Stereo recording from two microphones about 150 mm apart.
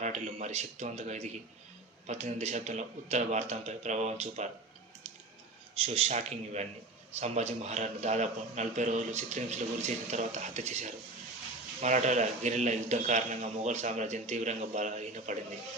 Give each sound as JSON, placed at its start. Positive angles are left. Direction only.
{"t": 0.0, "sound": "speech", "side_deg": -50}
{"t": 5.8, "sound": "speech", "side_deg": -40}